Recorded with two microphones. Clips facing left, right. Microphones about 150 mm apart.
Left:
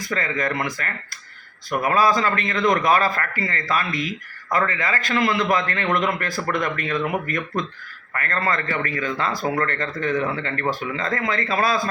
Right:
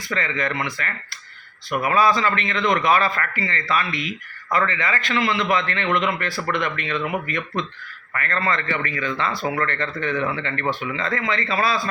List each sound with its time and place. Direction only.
0.1 s a man's voice: 45° left (ahead or behind)
1.9 s a man's voice: 40° left (ahead or behind)